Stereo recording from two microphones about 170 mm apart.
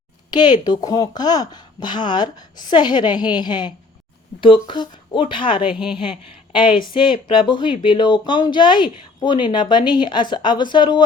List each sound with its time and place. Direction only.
0.3 s speech: 25° left (ahead or behind)